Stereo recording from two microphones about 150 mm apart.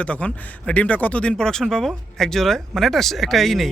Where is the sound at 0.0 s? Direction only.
10° left (ahead or behind).